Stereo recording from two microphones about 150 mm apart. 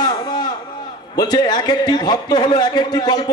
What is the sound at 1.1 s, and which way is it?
A man's voice, 25° left (ahead or behind).